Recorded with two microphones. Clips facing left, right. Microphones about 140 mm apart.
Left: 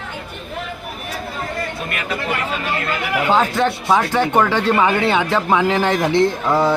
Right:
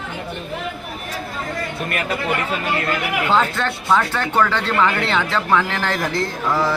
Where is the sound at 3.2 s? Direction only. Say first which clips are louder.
Left 3 dB; 10° left (ahead or behind).